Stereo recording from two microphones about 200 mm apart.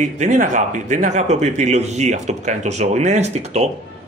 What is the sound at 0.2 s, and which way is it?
Speech, 40° right (ahead or behind).